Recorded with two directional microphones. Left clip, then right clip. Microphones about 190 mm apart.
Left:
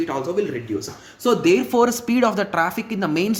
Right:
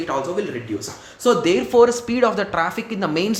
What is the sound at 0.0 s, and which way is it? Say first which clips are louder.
Speech: even; 15° left (ahead or behind).